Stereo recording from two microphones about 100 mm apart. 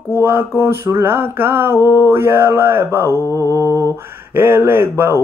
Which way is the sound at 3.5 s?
30° right (ahead or behind).